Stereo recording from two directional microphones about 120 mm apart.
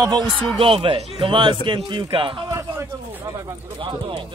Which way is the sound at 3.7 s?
45° right (ahead or behind).